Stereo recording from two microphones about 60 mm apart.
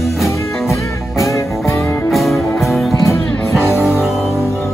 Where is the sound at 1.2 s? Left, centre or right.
Left.